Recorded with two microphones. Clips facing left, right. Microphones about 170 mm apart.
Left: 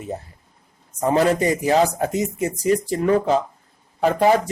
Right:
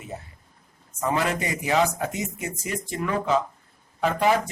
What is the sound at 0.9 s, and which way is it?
A man's voice, 35° left (ahead or behind).